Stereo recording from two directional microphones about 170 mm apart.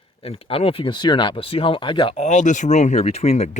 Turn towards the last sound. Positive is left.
turn(degrees=40)  # may be behind; listen again after turning